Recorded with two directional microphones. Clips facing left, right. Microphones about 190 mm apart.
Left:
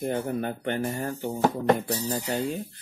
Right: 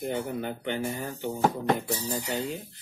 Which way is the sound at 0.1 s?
50° left (ahead or behind).